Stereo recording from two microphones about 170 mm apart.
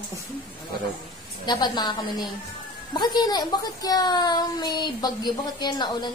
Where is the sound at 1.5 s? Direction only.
25° left (ahead or behind).